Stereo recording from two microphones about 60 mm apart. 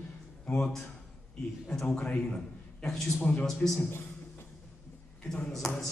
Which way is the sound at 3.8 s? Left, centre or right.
Left.